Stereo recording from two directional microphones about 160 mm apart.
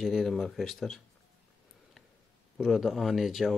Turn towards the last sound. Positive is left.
turn(degrees=0)  # may be behind; listen again after turning